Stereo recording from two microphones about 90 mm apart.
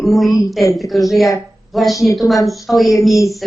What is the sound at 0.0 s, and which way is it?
A woman's voice, centre (ahead or behind).